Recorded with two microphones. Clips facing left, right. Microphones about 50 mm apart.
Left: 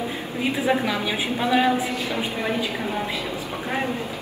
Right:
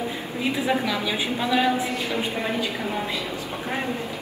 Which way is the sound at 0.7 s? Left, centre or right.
Centre.